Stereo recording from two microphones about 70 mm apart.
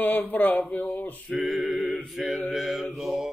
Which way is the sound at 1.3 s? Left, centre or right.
Centre.